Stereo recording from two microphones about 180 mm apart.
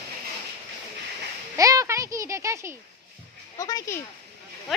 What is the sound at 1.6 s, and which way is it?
Speech, 20° right (ahead or behind).